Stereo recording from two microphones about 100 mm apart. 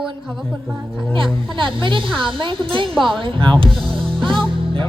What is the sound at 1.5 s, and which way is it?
A woman's voice, 55° right (ahead or behind).